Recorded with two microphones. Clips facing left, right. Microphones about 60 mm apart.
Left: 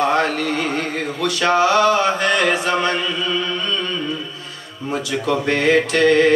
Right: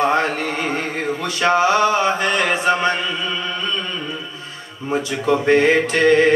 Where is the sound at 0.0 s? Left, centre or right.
Right.